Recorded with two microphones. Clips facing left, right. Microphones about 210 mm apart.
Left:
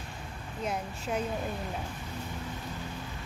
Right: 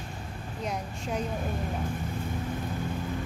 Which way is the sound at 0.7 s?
5° left (ahead or behind).